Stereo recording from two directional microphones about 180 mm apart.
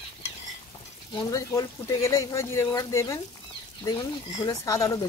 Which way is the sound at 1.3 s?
20° left (ahead or behind).